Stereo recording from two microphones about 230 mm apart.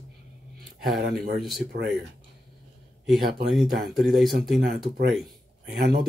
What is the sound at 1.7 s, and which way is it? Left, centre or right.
Speech, right.